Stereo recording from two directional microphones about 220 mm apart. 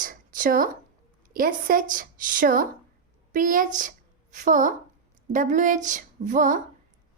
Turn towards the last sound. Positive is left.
turn(degrees=-35)  # may be behind; listen again after turning